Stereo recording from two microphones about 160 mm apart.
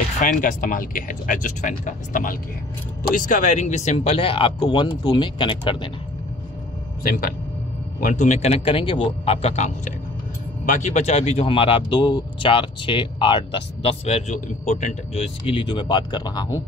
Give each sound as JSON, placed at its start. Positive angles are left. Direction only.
{"t": 0.2, "sound": "speech", "side_deg": 55}
{"t": 8.0, "sound": "speech", "side_deg": 50}